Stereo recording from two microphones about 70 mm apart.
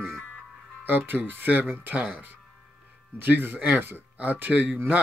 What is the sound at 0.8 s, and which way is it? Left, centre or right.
Speech, right.